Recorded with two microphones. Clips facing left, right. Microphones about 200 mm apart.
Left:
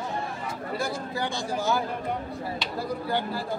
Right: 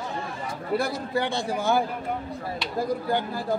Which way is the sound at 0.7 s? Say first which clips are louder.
Right 6 dB; 60° right (ahead or behind).